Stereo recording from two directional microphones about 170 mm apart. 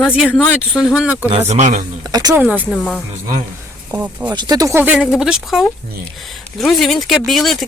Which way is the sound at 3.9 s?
10° right (ahead or behind).